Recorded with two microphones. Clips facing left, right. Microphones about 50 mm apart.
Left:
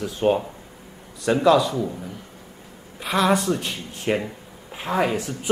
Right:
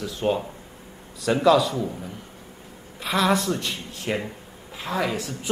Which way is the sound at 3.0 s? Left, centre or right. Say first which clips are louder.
Left 2 dB; centre.